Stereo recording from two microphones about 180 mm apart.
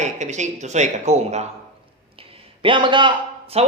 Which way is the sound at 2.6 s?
25° right (ahead or behind).